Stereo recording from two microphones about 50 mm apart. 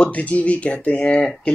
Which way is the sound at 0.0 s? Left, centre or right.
Left.